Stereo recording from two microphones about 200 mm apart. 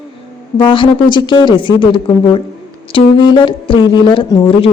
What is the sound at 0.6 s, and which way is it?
A woman's voice, 25° left (ahead or behind).